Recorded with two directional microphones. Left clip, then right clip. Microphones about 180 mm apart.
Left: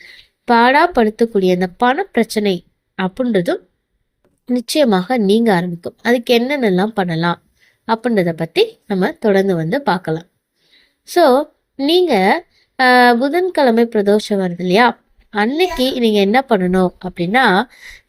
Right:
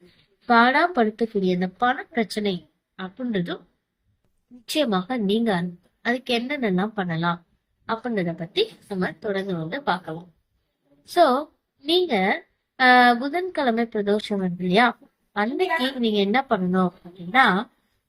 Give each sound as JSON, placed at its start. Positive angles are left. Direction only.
{"t": 0.4, "sound": "a woman's voice", "side_deg": 55}
{"t": 4.7, "sound": "a woman's voice", "side_deg": 55}